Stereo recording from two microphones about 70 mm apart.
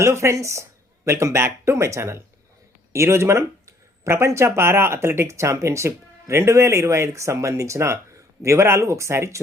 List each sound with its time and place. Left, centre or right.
0.0 s speech: right